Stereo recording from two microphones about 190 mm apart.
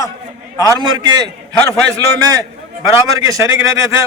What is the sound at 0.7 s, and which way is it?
A man's voice, 20° right (ahead or behind).